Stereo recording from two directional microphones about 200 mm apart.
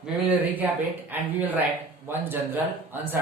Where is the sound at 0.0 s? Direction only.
10° right (ahead or behind).